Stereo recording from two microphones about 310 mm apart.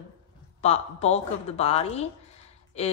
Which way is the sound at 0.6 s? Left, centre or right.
Left.